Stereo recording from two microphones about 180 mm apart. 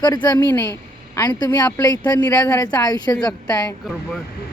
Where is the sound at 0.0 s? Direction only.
25° left (ahead or behind).